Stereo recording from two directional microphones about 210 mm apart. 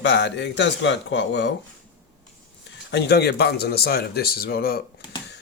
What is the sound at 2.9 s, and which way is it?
Speech, 55° left (ahead or behind).